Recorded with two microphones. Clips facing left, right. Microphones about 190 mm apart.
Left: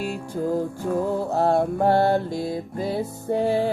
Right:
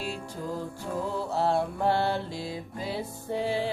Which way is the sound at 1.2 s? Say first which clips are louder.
Left 3 dB; 50° left (ahead or behind).